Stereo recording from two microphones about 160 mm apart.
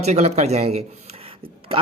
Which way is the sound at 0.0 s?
40° right (ahead or behind).